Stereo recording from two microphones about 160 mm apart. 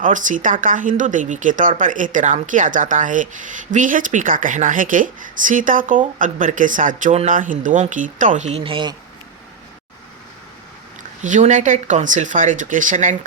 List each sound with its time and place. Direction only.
0.0 s speech: 55° right (ahead or behind); by 9.0 s 30° right (ahead or behind)
11.2 s speech: 50° right (ahead or behind)